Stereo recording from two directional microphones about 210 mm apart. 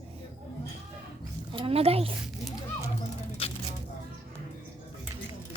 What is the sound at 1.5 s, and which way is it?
Speech, 25° right (ahead or behind).